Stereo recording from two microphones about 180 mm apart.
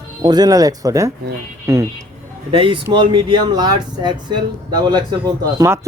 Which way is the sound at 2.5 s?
30° right (ahead or behind).